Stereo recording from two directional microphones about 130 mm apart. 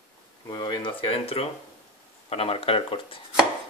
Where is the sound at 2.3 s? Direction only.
50° left (ahead or behind).